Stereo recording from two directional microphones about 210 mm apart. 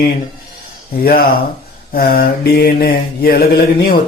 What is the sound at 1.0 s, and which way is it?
Mantra, 45° left (ahead or behind).